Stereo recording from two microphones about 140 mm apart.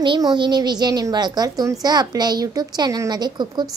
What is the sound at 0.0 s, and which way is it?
A woman's voice, 35° right (ahead or behind).